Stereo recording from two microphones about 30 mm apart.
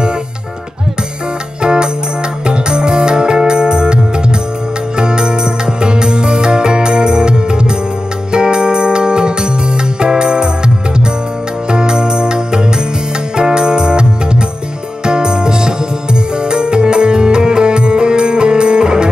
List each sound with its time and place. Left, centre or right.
1.6 s music: right
11.7 s music: right